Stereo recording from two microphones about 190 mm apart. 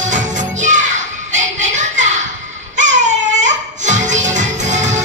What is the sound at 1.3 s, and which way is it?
Children playing, 40° right (ahead or behind).